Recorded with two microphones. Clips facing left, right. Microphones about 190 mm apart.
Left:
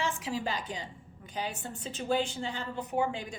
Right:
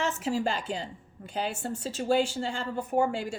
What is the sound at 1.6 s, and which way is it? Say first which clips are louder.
A woman's voice: right 6 dB; 45° right (ahead or behind).